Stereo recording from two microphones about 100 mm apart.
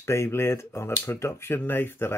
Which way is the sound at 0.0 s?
25° left (ahead or behind).